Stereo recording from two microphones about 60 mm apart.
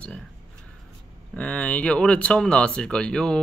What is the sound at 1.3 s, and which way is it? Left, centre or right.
Speech, left.